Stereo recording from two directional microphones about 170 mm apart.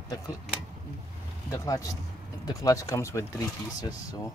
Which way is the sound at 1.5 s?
20° left (ahead or behind).